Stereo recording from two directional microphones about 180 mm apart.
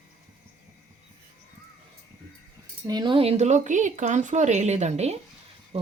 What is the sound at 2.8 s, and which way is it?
Speech, 25° right (ahead or behind).